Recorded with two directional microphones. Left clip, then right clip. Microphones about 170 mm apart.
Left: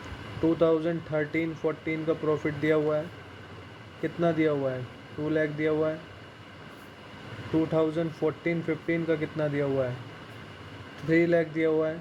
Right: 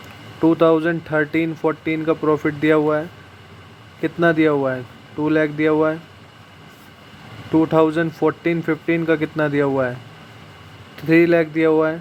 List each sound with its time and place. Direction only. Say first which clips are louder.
0.5 s speech: right 8 dB; 55° right (ahead or behind)
4.0 s speech: right 9 dB; 55° right (ahead or behind)
7.7 s speech: right 10 dB; 55° right (ahead or behind)
11.1 s speech: right 9 dB; 55° right (ahead or behind)